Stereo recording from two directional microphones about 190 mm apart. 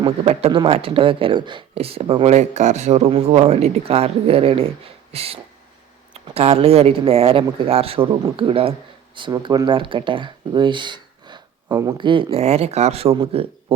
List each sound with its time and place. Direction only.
0.0 s speech: 30° right (ahead or behind)